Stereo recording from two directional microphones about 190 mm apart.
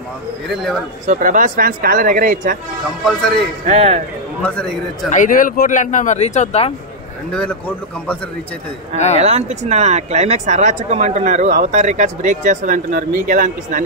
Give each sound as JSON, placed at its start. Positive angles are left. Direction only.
{"t": 1.0, "sound": "speech", "side_deg": -45}
{"t": 3.1, "sound": "a man's voice", "side_deg": 5}
{"t": 3.6, "sound": "speech", "side_deg": -35}
{"t": 4.4, "sound": "a man's voice", "side_deg": 5}
{"t": 5.1, "sound": "speech", "side_deg": 45}
{"t": 7.3, "sound": "a man's voice", "side_deg": 5}
{"t": 8.9, "sound": "speech", "side_deg": 35}
{"t": 9.2, "sound": "speech", "side_deg": -35}